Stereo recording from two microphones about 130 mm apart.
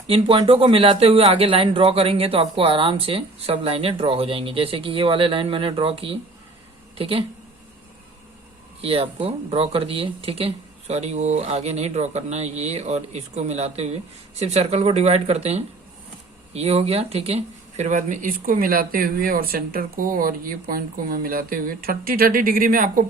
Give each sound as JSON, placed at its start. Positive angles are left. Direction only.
{"t": 0.1, "sound": "speech", "side_deg": -45}
{"t": 8.8, "sound": "speech", "side_deg": -45}